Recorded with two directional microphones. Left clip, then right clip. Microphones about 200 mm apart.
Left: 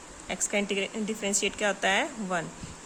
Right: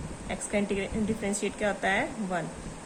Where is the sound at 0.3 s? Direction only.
35° left (ahead or behind).